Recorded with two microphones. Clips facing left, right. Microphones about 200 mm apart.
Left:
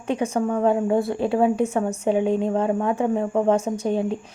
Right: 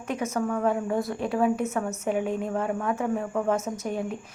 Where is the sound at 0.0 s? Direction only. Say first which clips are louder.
Left 5 dB; 30° left (ahead or behind).